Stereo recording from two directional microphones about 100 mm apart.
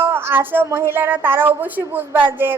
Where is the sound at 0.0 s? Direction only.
20° right (ahead or behind).